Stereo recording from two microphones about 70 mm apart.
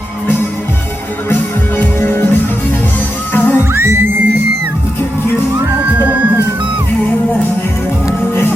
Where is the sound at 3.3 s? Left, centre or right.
Left.